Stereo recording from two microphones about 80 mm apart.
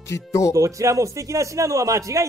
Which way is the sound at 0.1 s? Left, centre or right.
Left.